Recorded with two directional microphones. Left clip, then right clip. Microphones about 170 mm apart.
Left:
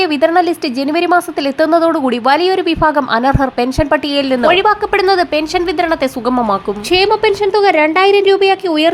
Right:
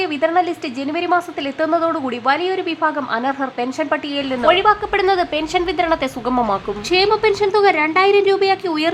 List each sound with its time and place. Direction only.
0.0 s a woman's voice: 35° left (ahead or behind)